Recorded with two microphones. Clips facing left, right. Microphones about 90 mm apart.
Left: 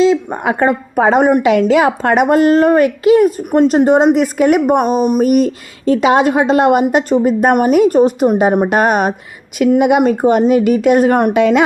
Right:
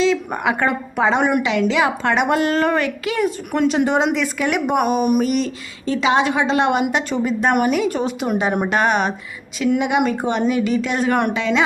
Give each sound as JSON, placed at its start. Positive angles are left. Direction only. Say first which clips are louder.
{"t": 0.4, "sound": "a woman's voice", "louder": "left 5 dB", "side_deg": 40}
{"t": 5.1, "sound": "a woman's voice", "louder": "left 7 dB", "side_deg": 50}